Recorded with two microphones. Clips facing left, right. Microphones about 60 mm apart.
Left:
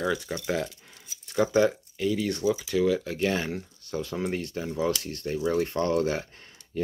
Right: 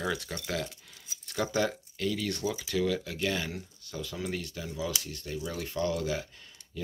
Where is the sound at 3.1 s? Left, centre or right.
Left.